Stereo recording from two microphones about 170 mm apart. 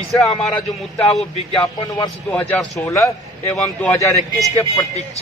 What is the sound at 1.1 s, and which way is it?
Speech, 5° left (ahead or behind).